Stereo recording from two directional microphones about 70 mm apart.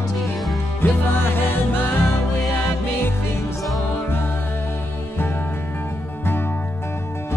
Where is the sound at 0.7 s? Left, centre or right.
Left.